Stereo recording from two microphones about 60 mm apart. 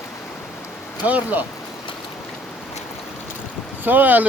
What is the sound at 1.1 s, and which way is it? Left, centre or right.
Speech, right.